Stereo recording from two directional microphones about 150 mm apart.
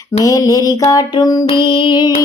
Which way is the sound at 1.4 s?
30° left (ahead or behind).